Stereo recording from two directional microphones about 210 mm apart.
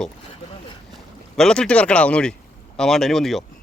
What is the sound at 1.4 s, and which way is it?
Speech, 5° left (ahead or behind).